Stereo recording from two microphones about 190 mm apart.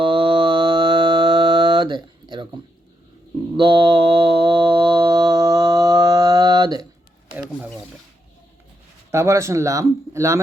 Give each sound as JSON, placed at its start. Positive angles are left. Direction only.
{"t": 0.0, "sound": "music", "side_deg": -25}
{"t": 3.6, "sound": "mantra", "side_deg": -25}
{"t": 9.1, "sound": "speech", "side_deg": -15}